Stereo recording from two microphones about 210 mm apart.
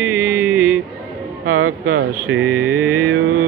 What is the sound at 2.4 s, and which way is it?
Mantra, 10° right (ahead or behind).